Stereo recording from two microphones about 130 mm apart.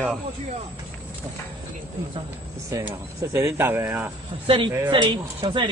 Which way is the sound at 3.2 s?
20° right (ahead or behind).